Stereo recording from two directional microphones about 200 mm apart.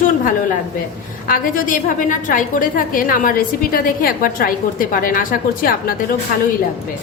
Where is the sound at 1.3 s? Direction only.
45° left (ahead or behind).